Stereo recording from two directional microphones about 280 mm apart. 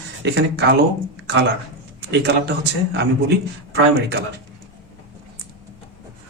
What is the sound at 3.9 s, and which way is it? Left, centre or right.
Speech, right.